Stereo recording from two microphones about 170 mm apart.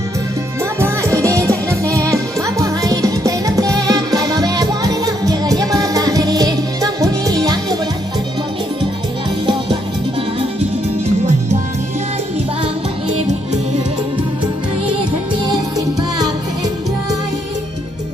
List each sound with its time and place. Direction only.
0.6 s music: 15° right (ahead or behind)